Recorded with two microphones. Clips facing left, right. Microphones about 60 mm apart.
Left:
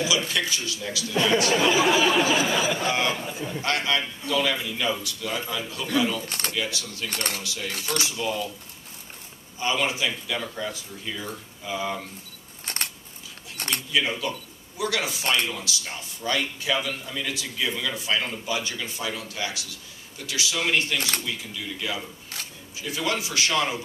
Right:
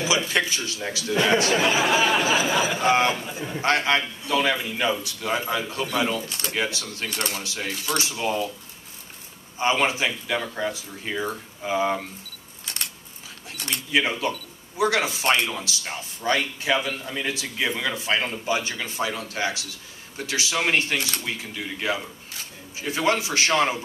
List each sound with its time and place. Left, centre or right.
0.3 s speech: right
1.1 s speech: right
3.3 s speech: centre
3.6 s speech: right
6.2 s speech: left
6.5 s speech: right
9.6 s speech: right
12.6 s a sound: left
13.6 s speech: left
13.9 s speech: right